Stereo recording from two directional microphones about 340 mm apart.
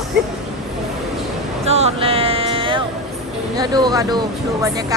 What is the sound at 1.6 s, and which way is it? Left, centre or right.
Speech, centre.